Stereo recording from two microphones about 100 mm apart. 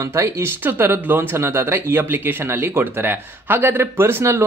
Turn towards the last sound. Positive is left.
turn(degrees=-25)  # may be behind; listen again after turning